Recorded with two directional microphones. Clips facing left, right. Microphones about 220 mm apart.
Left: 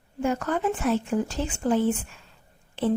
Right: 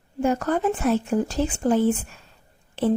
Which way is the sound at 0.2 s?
40° right (ahead or behind).